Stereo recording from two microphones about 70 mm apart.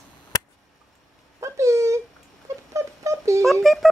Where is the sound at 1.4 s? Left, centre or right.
Right.